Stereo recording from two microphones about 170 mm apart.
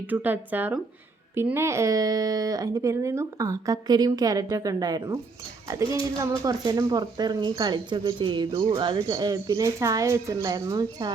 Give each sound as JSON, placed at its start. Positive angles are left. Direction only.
{"t": 0.1, "sound": "speech", "side_deg": -10}